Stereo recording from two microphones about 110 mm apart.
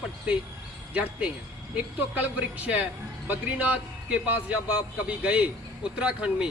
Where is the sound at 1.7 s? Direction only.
15° right (ahead or behind).